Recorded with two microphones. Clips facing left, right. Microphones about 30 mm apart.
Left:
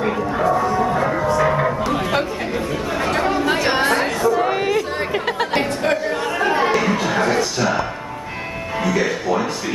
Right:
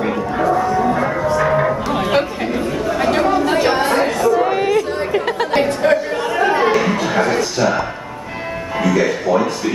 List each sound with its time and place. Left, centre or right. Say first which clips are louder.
0.6 s music: right 2 dB; centre
2.0 s a sound: right 3 dB; centre
3.0 s chatter: right 4 dB; centre
3.3 s chatter: right 3 dB; centre
8.8 s music: right 4 dB; centre